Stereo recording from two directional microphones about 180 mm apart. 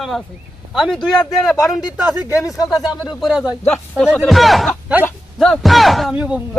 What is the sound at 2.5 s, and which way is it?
Speech, 20° left (ahead or behind).